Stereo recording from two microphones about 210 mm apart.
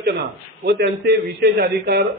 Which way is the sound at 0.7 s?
50° right (ahead or behind).